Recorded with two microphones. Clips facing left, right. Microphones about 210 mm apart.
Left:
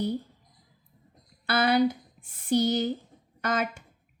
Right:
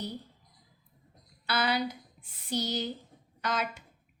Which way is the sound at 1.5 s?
50° left (ahead or behind).